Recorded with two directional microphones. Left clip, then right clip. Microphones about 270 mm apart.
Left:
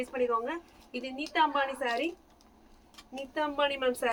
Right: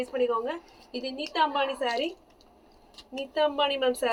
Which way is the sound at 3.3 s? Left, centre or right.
Left.